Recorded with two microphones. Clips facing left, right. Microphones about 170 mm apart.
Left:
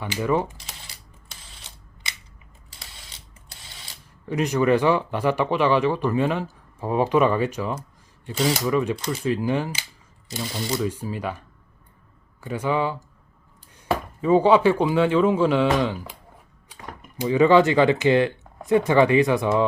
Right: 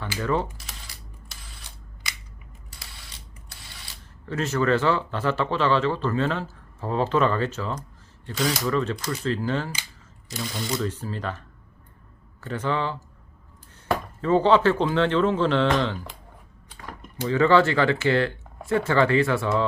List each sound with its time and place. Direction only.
0.0 s speech: 15° left (ahead or behind)
2.0 s scissors: 25° left (ahead or behind)
4.3 s speech: 15° left (ahead or behind)
14.2 s speech: 10° left (ahead or behind)